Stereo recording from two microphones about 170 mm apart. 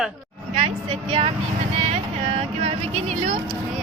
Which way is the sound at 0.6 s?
35° right (ahead or behind).